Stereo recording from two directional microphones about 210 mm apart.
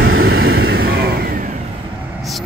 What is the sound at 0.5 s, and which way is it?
Vehicle, 50° right (ahead or behind).